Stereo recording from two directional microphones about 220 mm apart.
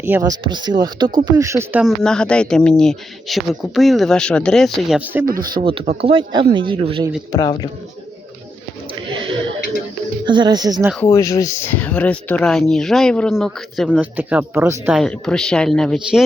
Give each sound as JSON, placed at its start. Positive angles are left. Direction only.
{"t": 0.0, "sound": "speech", "side_deg": -15}
{"t": 5.4, "sound": "speech", "side_deg": -20}
{"t": 7.3, "sound": "a man's voice", "side_deg": 15}
{"t": 10.2, "sound": "speech", "side_deg": -20}
{"t": 11.0, "sound": "speech", "side_deg": 15}